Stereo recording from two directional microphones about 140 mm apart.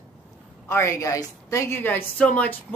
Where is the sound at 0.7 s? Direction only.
20° left (ahead or behind).